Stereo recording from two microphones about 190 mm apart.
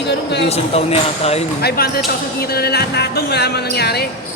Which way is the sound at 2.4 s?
55° left (ahead or behind).